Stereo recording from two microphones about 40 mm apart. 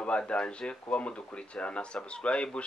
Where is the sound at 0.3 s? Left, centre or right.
Left.